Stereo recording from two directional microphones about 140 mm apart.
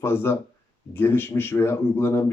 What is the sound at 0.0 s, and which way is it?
Speech, 15° left (ahead or behind).